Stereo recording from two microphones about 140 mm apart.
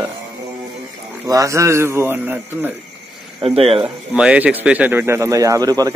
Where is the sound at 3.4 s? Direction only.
45° right (ahead or behind).